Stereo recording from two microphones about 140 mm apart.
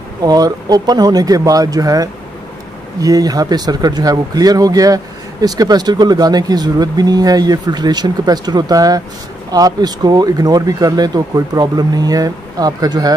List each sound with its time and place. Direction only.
0.2 s speech: 30° right (ahead or behind)